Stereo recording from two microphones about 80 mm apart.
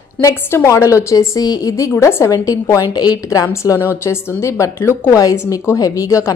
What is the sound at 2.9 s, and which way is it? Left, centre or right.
Speech, left.